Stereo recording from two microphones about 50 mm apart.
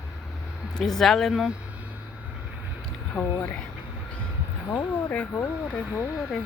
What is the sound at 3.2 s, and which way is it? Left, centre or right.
Speech, left.